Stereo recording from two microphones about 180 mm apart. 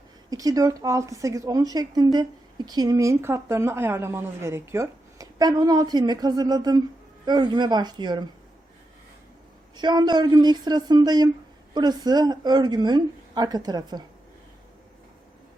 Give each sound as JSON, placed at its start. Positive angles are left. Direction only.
{"t": 0.3, "sound": "a woman's voice", "side_deg": -20}
{"t": 9.7, "sound": "a woman's voice", "side_deg": -25}